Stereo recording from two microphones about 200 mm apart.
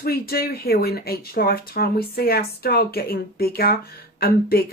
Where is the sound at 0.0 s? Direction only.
50° left (ahead or behind).